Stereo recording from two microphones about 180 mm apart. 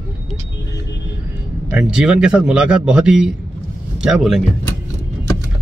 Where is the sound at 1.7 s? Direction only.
5° right (ahead or behind).